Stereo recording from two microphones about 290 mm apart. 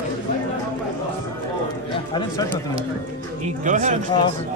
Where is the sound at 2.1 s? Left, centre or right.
Centre.